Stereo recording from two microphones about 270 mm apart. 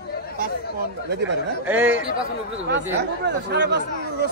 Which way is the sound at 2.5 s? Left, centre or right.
Right.